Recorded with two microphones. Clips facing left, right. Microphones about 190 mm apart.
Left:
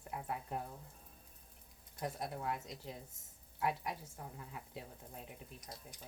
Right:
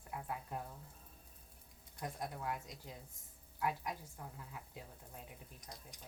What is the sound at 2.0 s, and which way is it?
Speech, 25° left (ahead or behind).